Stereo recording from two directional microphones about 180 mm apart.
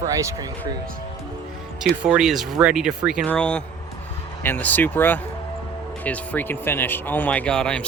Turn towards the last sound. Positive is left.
turn(degrees=5)  # may be behind; listen again after turning